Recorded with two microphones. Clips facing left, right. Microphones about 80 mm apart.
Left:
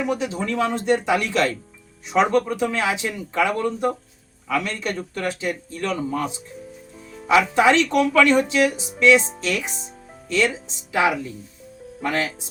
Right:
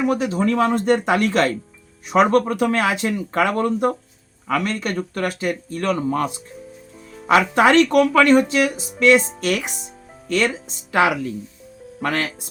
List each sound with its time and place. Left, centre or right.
0.1 s a man's voice: right
9.4 s speech: right
10.9 s speech: right